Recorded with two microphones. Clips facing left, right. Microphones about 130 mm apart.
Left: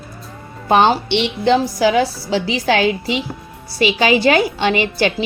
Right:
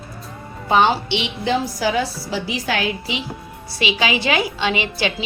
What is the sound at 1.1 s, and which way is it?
A woman's voice, 65° left (ahead or behind).